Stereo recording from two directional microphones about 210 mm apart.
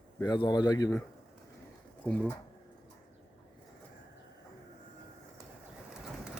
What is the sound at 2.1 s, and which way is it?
Speech, 5° left (ahead or behind).